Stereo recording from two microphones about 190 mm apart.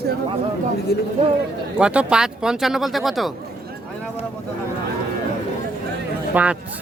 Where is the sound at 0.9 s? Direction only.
60° left (ahead or behind).